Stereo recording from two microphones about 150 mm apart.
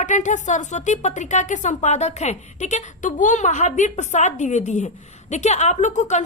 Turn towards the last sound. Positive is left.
turn(degrees=50)  # may be behind; listen again after turning